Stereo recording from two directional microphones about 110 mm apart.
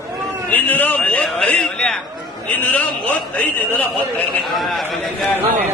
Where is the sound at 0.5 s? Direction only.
15° left (ahead or behind).